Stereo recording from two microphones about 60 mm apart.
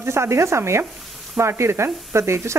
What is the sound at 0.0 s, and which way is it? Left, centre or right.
A woman's voice, right.